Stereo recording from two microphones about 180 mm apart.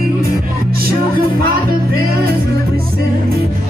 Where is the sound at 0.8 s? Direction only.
55° right (ahead or behind).